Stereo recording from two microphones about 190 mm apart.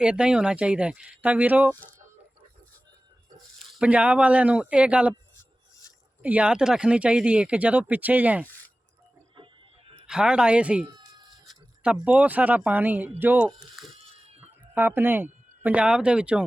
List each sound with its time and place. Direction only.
0.0 s speech: 5° right (ahead or behind)
3.8 s speech: 5° right (ahead or behind)
6.2 s speech: 5° right (ahead or behind)
9.3 s a sound: 25° right (ahead or behind)
10.1 s speech: 5° right (ahead or behind)
11.4 s a sound: 5° right (ahead or behind)
12.0 s speech: 10° right (ahead or behind)